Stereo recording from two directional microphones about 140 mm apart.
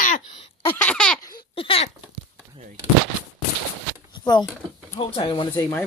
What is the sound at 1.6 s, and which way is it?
Speech, 45° left (ahead or behind).